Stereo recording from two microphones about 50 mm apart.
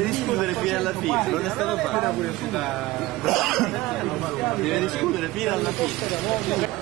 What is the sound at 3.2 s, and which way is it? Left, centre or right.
Speech, centre.